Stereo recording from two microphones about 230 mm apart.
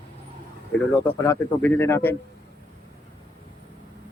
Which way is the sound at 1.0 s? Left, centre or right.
Centre.